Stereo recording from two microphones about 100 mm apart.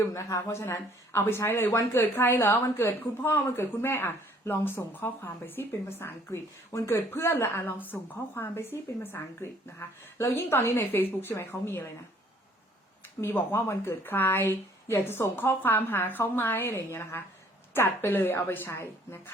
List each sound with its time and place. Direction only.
0.0 s speech: 30° left (ahead or behind)
13.2 s speech: 25° left (ahead or behind)